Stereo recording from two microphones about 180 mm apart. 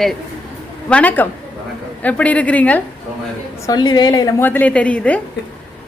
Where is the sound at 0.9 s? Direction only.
10° left (ahead or behind).